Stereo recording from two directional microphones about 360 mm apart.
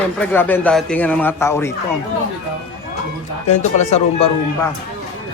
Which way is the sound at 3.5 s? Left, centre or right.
Centre.